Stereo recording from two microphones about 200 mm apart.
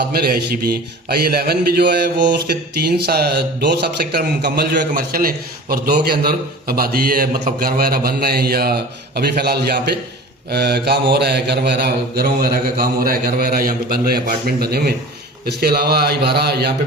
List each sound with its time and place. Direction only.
0.0 s speech: 50° right (ahead or behind)